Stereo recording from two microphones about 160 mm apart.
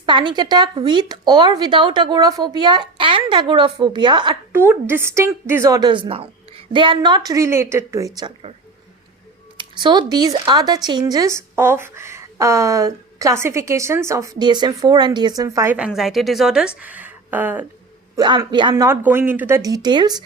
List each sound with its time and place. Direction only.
0.0 s a woman's voice: 30° right (ahead or behind)
4.5 s a woman's voice: 15° right (ahead or behind)
5.9 s a woman's voice: 35° right (ahead or behind)
9.6 s a woman's voice: 30° right (ahead or behind)
15.7 s a woman's voice: 5° right (ahead or behind)
18.2 s a woman's voice: 30° right (ahead or behind)